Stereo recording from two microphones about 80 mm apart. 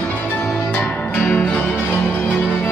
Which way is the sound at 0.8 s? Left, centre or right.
Centre.